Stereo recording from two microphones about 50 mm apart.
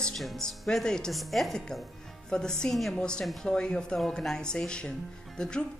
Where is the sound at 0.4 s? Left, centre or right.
Centre.